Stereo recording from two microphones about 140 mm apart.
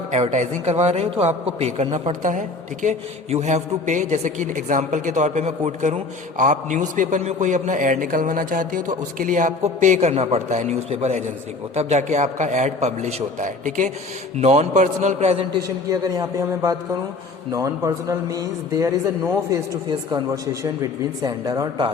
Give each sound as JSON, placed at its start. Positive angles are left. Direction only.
{"t": 0.1, "sound": "a man's voice", "side_deg": -55}
{"t": 2.2, "sound": "a man's voice", "side_deg": -65}
{"t": 14.4, "sound": "a man's voice", "side_deg": -50}
{"t": 15.5, "sound": "a man's voice", "side_deg": -25}